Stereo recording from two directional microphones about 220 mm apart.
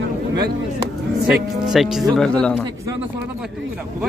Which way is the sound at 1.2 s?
Centre (ahead or behind).